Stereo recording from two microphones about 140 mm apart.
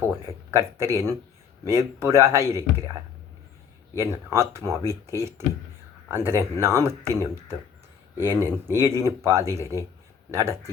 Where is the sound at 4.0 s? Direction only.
20° right (ahead or behind).